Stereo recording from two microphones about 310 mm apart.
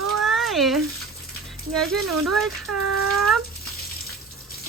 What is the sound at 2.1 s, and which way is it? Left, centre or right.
Speech, right.